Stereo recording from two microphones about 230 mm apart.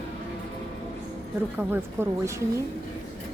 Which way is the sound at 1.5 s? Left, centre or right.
Centre.